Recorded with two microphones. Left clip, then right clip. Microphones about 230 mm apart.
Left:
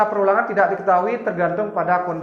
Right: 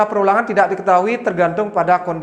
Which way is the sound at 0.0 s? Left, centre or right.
Right.